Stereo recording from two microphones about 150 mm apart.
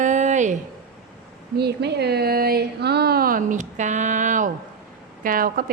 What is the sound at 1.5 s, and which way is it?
Speech, 90° right.